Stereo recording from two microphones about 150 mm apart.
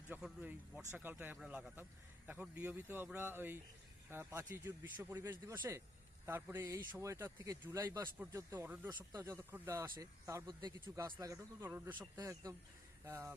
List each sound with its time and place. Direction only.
0.1 s a man's voice: 10° right (ahead or behind)
8.9 s speech: 25° right (ahead or behind)
10.8 s a man's voice: 15° right (ahead or behind)